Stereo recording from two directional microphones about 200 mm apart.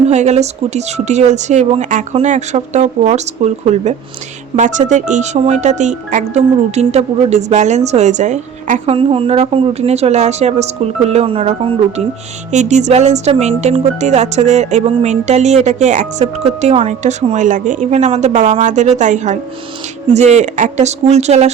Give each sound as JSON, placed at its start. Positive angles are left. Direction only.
{"t": 0.1, "sound": "speech", "side_deg": -35}